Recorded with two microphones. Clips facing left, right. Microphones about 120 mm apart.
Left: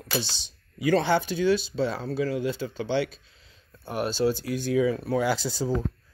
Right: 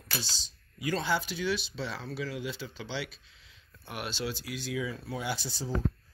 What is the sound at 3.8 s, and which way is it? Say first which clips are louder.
Speech: left 11 dB; 40° left (ahead or behind).